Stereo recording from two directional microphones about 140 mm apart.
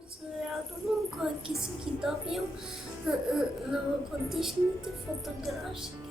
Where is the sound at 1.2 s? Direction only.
Centre (ahead or behind).